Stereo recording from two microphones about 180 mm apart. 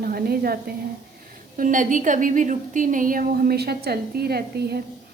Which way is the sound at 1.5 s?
45° right (ahead or behind).